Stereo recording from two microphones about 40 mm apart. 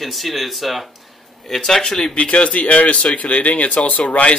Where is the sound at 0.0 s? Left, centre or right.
Centre.